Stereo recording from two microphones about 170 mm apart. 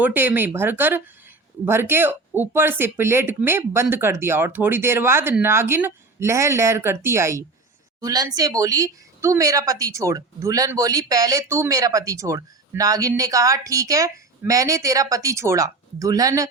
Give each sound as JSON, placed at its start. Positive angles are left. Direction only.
{"t": 0.0, "sound": "a woman's voice", "side_deg": -10}